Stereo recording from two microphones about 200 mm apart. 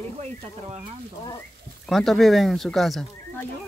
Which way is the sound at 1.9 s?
Centre (ahead or behind).